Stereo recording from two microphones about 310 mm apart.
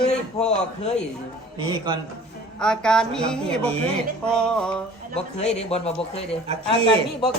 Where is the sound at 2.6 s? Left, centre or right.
Centre.